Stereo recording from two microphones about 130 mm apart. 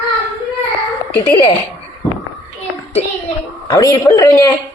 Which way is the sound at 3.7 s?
30° left (ahead or behind).